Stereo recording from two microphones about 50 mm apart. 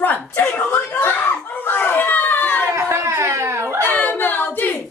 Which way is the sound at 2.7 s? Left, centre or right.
Right.